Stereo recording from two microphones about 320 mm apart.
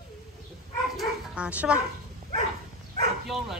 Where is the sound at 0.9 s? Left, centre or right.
Centre.